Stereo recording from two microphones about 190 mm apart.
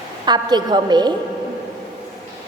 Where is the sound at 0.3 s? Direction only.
20° right (ahead or behind).